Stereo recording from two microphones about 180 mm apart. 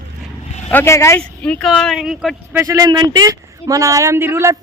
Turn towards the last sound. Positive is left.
turn(degrees=-15)  # may be behind; listen again after turning